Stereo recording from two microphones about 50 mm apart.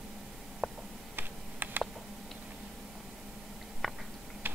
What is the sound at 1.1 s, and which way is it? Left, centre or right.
Computer keyboard, right.